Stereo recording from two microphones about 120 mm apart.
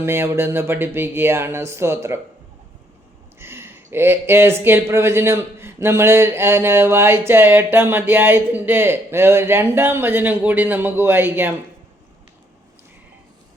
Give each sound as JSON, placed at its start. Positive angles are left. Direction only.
{"t": 0.0, "sound": "speech", "side_deg": -20}
{"t": 3.3, "sound": "speech", "side_deg": -20}